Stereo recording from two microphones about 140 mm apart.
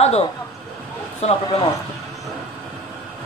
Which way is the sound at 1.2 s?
50° left (ahead or behind).